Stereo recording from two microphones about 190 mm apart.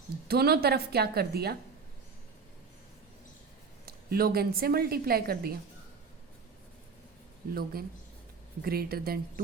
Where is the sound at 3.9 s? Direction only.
55° right (ahead or behind).